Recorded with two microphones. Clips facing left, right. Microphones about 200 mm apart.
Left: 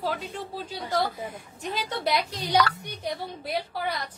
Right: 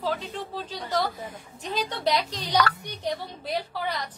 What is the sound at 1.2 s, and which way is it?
A woman's voice, 10° left (ahead or behind).